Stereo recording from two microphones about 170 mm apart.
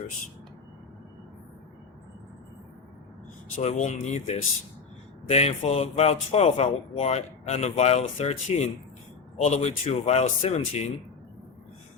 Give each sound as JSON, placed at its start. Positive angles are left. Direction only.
{"t": 3.6, "sound": "speech", "side_deg": 45}